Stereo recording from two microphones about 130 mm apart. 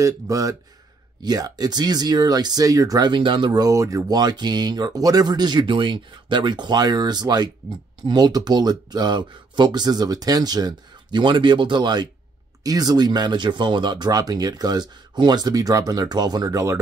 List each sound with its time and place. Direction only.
0.0 s speech: 25° right (ahead or behind)